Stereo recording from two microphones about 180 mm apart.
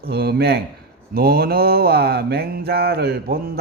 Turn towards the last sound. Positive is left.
turn(degrees=-60)  # may be behind; listen again after turning